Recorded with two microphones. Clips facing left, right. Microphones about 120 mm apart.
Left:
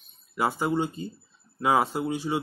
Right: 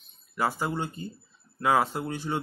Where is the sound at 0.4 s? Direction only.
15° left (ahead or behind).